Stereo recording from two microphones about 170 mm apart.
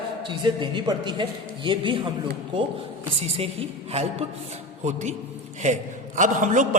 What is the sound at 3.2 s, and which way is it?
A woman's voice, 35° right (ahead or behind).